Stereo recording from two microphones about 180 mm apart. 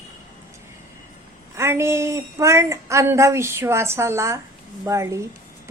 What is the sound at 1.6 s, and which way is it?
A woman's voice, 15° right (ahead or behind).